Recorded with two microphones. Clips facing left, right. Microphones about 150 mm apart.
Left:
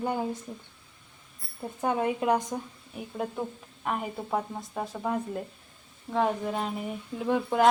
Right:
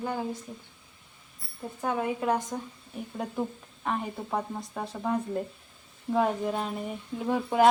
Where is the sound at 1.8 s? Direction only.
20° left (ahead or behind).